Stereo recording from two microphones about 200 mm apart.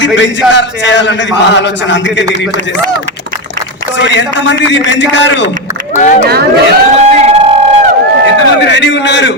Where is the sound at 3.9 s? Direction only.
60° left (ahead or behind).